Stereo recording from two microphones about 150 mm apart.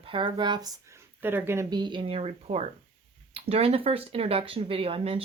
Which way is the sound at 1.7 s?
30° right (ahead or behind).